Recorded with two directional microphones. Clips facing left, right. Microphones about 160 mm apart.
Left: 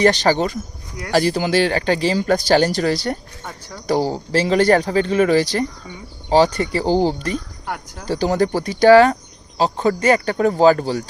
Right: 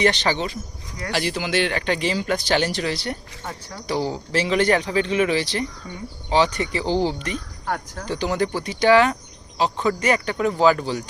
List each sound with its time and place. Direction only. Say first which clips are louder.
0.0 s speech: left 5 dB; 40° left (ahead or behind)